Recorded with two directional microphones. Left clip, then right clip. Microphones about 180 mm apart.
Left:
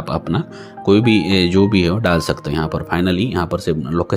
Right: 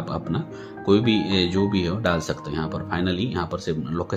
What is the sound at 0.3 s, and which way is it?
Speech, 25° left (ahead or behind).